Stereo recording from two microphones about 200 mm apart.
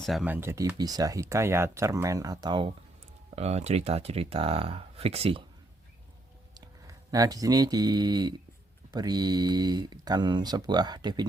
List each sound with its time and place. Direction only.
0.0 s speech: centre (ahead or behind); by 2.6 s 20° right (ahead or behind)
3.3 s speech: 30° right (ahead or behind)
6.5 s speech: 20° right (ahead or behind)